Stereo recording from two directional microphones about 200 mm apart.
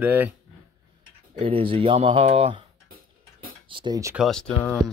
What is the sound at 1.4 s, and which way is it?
Speech, 25° right (ahead or behind).